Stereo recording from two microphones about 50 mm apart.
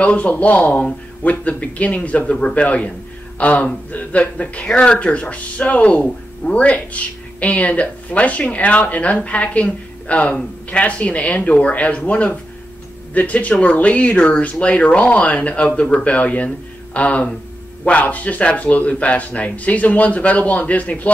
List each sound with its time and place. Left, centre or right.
0.0 s speech: left